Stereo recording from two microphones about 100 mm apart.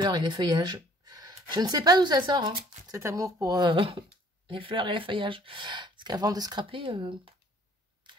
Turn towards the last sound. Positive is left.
turn(degrees=-55)  # may be behind; listen again after turning